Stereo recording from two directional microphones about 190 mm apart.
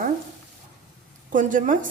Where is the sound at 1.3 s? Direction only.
45° right (ahead or behind).